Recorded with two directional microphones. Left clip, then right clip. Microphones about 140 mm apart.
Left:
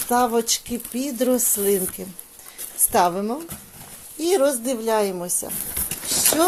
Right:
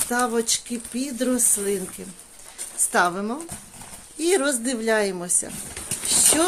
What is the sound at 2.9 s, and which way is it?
Speech, 20° left (ahead or behind).